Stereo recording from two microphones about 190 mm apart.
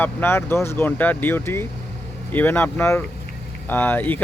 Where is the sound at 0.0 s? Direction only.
10° left (ahead or behind).